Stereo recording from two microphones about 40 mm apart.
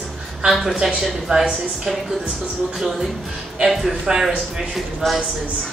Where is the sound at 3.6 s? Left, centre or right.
Centre.